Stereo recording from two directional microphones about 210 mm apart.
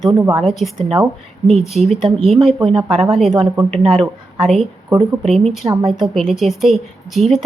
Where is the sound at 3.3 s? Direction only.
25° right (ahead or behind).